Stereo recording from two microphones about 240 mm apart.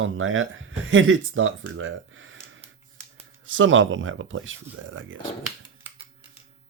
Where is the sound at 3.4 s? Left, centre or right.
Right.